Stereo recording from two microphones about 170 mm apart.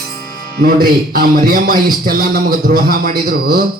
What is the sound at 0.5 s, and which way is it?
A man's voice, 60° right (ahead or behind).